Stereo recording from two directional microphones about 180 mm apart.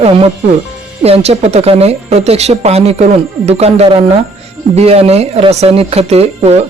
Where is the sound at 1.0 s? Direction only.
35° right (ahead or behind).